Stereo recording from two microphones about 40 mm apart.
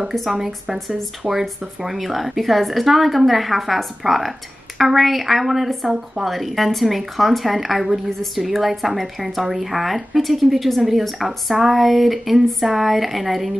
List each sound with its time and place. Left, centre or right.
0.1 s speech: centre
1.2 s speech: right
1.8 s speech: centre
5.9 s speech: centre
6.2 s speech: centre